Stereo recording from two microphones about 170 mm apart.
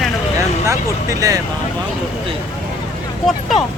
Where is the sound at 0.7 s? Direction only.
20° right (ahead or behind).